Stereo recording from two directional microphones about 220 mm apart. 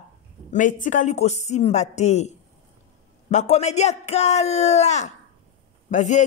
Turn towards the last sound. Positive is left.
turn(degrees=35)  # may be behind; listen again after turning